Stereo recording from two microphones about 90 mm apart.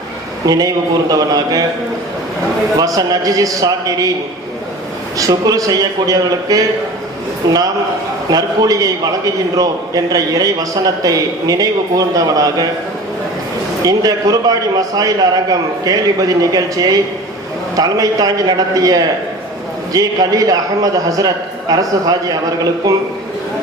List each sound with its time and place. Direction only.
0.4 s a man's voice: 45° right (ahead or behind)
2.7 s speech: 40° right (ahead or behind)
5.1 s a man's voice: 40° right (ahead or behind)
13.8 s a man's voice: 45° right (ahead or behind)